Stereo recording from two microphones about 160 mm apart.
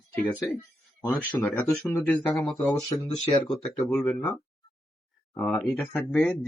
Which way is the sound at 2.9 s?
20° left (ahead or behind).